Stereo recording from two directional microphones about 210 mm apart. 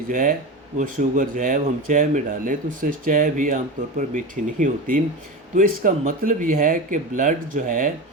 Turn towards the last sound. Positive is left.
turn(degrees=-40)  # may be behind; listen again after turning